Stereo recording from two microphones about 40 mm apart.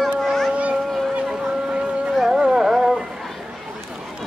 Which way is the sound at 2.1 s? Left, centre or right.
Centre.